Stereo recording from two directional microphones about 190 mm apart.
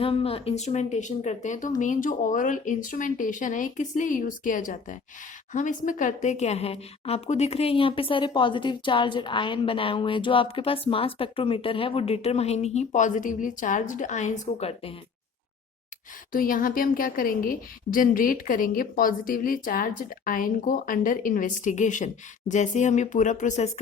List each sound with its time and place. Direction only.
0.0 s a woman's voice: 30° left (ahead or behind)
16.3 s a woman's voice: 45° left (ahead or behind)